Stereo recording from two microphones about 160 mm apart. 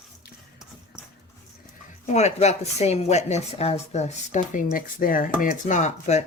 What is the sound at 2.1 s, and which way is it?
Speech, 45° left (ahead or behind).